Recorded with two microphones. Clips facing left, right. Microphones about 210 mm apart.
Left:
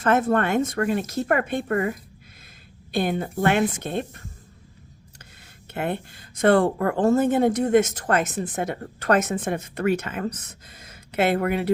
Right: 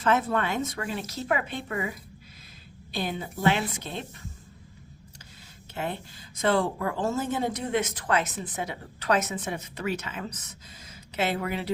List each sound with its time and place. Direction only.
0.0 s speech: 50° left (ahead or behind)
5.7 s speech: 60° left (ahead or behind)